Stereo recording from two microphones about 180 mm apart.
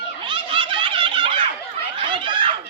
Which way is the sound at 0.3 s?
25° right (ahead or behind).